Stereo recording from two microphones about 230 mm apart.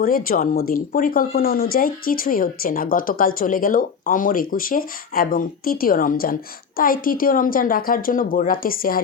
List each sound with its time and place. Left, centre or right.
0.3 s speech: left